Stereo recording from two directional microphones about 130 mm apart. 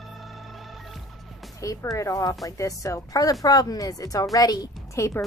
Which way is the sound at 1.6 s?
25° left (ahead or behind).